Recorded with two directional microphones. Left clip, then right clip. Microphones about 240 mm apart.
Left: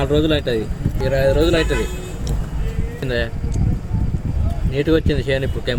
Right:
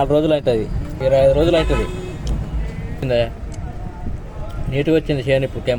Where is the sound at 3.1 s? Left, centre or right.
Right.